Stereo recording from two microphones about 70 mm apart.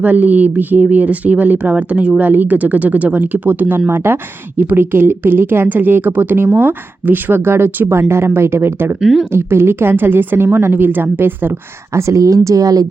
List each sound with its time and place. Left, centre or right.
0.0 s speech: right
9.0 s speech: centre
9.3 s a woman's voice: right
11.9 s speech: right